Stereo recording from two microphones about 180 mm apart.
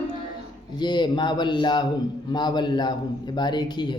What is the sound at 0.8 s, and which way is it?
A man's voice, 25° left (ahead or behind).